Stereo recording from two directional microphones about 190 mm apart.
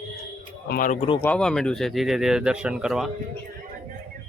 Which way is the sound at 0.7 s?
45° left (ahead or behind).